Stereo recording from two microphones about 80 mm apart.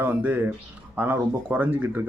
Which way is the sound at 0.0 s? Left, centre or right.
Right.